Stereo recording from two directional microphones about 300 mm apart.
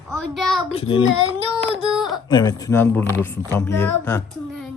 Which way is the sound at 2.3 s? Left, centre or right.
Centre.